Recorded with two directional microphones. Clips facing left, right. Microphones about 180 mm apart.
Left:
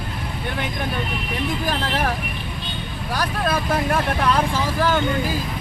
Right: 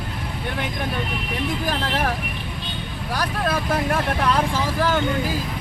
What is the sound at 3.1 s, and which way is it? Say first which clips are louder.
Speech: left 1 dB; centre (ahead or behind).